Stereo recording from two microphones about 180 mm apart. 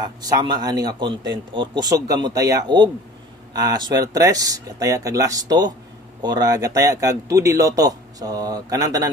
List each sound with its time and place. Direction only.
0.0 s speech: 20° right (ahead or behind)